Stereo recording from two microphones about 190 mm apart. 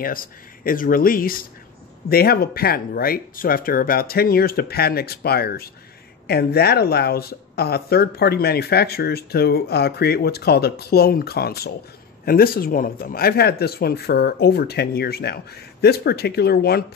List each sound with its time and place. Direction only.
0.0 s speech: 50° left (ahead or behind)